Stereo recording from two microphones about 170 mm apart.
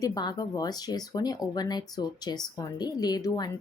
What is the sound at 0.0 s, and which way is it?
Speech, 25° left (ahead or behind).